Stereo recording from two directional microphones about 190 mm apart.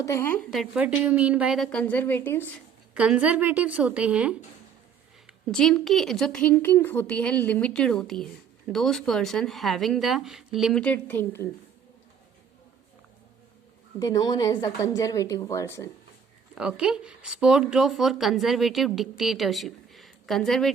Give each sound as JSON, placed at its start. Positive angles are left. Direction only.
{"t": 0.0, "sound": "a woman's voice", "side_deg": 15}
{"t": 0.5, "sound": "speech", "side_deg": 0}
{"t": 2.9, "sound": "a woman's voice", "side_deg": -5}
{"t": 14.0, "sound": "a woman's voice", "side_deg": 20}
{"t": 16.6, "sound": "speech", "side_deg": -5}